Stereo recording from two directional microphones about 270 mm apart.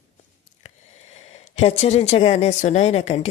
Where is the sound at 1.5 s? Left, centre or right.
Left.